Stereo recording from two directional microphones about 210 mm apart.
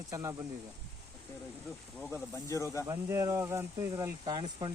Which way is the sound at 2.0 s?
5° left (ahead or behind).